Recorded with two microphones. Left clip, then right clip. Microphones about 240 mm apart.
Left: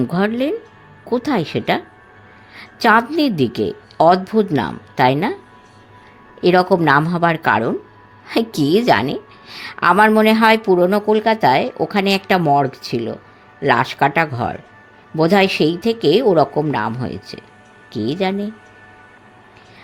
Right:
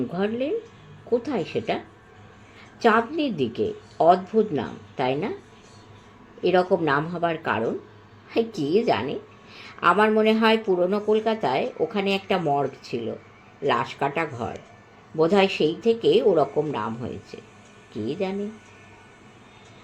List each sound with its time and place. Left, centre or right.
0.1 s a woman's voice: left
6.4 s a woman's voice: left